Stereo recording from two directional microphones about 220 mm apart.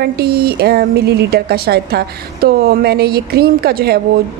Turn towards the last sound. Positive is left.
turn(degrees=-45)  # may be behind; listen again after turning